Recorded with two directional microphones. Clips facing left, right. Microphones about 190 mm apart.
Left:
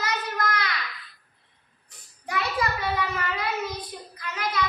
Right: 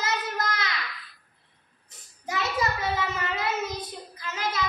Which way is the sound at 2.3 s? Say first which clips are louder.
Even; 25° right (ahead or behind).